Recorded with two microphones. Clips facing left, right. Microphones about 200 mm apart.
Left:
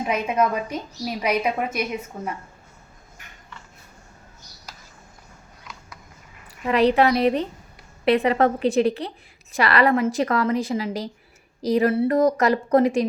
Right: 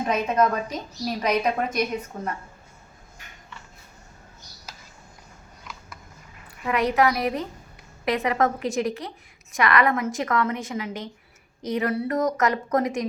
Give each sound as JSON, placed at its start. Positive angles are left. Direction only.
{"t": 0.0, "sound": "a woman's voice", "side_deg": 10}
{"t": 6.7, "sound": "a woman's voice", "side_deg": 30}